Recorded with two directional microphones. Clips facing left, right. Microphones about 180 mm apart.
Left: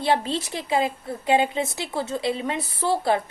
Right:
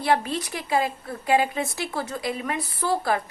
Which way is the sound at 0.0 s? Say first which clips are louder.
Even; 25° left (ahead or behind).